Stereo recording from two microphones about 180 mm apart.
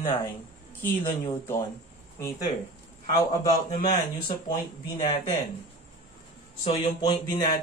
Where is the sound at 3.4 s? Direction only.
20° left (ahead or behind).